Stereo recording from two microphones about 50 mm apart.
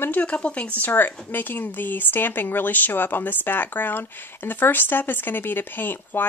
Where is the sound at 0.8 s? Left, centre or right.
Left.